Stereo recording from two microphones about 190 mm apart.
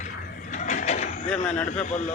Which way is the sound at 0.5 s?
40° left (ahead or behind).